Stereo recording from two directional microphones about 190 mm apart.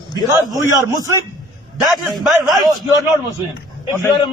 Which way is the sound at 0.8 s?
15° right (ahead or behind).